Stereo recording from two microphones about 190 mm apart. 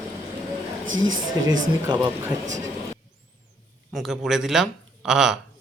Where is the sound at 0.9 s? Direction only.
90° right.